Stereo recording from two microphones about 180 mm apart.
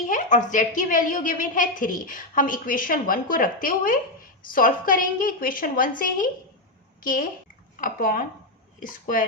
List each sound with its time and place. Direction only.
0.1 s a woman's voice: 45° left (ahead or behind)